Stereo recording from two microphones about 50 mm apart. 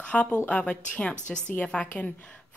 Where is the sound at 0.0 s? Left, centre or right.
Left.